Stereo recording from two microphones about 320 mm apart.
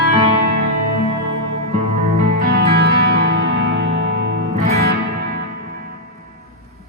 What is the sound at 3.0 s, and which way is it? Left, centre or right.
Music, right.